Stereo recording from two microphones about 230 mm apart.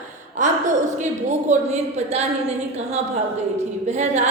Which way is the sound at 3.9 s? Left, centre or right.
Right.